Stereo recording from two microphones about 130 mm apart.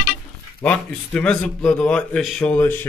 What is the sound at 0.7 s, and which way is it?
Speech, 10° left (ahead or behind).